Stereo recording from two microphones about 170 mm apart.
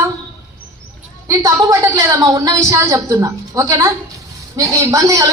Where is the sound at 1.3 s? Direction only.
20° right (ahead or behind).